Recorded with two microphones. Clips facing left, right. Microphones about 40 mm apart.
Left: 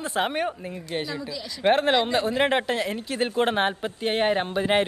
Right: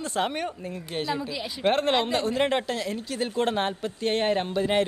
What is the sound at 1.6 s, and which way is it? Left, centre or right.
A man's voice, centre.